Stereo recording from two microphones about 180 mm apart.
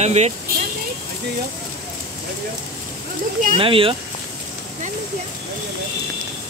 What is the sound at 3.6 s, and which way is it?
Speech, 30° right (ahead or behind).